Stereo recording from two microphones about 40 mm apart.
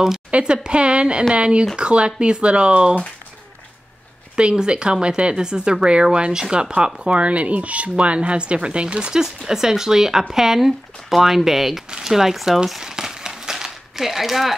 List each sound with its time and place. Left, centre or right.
0.3 s speech: right
4.4 s speech: right
12.8 s crumpling: centre